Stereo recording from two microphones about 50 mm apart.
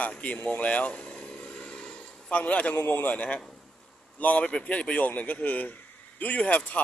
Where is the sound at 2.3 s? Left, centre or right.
Left.